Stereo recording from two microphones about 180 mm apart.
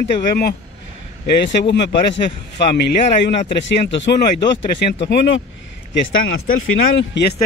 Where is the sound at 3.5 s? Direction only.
80° left.